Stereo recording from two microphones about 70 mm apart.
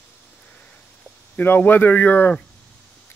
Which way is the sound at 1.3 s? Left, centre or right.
Left.